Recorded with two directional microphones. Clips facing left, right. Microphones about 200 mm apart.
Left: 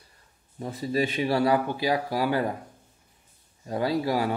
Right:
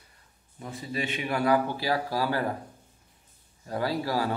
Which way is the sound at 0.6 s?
35° left (ahead or behind).